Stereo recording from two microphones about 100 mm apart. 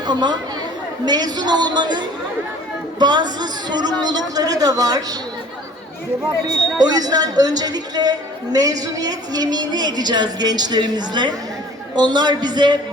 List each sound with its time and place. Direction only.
0.0 s a woman's voice: 45° right (ahead or behind)
6.7 s a woman's voice: 40° right (ahead or behind)